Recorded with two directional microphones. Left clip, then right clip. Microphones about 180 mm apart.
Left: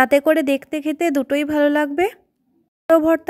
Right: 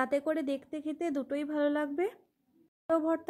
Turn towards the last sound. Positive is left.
turn(degrees=35)  # may be behind; listen again after turning